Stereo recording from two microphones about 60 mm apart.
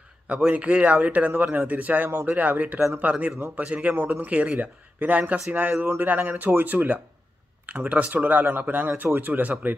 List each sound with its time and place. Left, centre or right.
0.5 s speech: right